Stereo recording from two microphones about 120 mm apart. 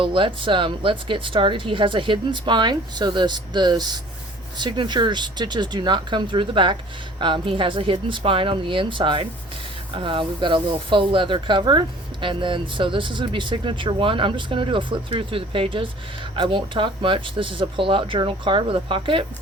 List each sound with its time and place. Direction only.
0.0 s speech: 45° right (ahead or behind)